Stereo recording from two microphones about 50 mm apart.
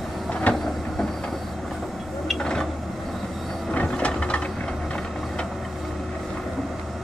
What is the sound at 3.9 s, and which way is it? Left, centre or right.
Ratchet, centre.